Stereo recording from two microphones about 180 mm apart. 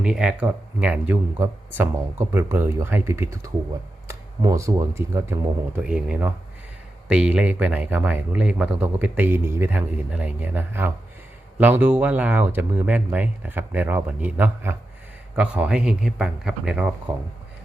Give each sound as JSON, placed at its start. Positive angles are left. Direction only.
{"t": 0.0, "sound": "speech", "side_deg": -5}